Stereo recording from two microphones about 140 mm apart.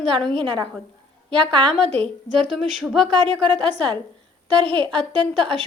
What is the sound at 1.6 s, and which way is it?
A woman's voice, 5° left (ahead or behind).